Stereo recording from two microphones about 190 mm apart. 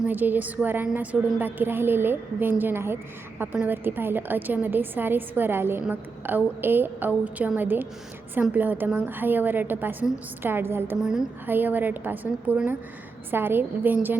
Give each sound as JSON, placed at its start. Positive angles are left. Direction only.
{"t": 0.0, "sound": "a woman's voice", "side_deg": -10}